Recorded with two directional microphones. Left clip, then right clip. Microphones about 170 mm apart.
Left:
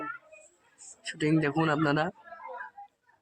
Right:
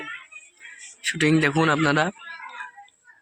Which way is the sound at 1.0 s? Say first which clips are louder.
Right 7 dB; 15° right (ahead or behind).